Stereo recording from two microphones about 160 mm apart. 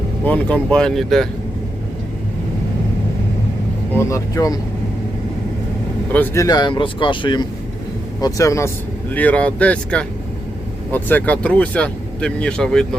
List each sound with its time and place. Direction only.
0.3 s speech: 10° left (ahead or behind)
3.9 s speech: 20° left (ahead or behind)
6.1 s speech: 15° left (ahead or behind); by 7.4 s 30° left (ahead or behind)
8.2 s speech: 20° left (ahead or behind); by 13.0 s 5° left (ahead or behind)